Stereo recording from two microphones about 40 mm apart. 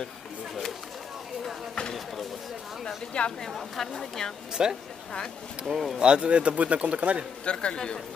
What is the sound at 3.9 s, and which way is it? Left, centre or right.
Speech, centre.